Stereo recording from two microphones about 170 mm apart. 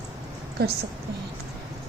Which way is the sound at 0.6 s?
70° right (ahead or behind).